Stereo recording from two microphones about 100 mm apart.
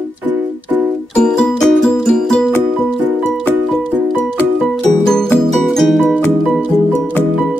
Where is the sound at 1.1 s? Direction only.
10° left (ahead or behind).